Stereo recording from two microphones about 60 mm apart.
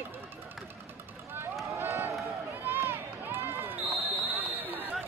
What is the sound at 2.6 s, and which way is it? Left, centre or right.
Run, right.